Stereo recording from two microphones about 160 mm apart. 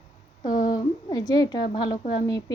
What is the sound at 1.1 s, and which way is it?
Speech, 25° left (ahead or behind).